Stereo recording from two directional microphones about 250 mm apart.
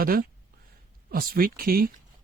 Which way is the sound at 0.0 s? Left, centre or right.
Right.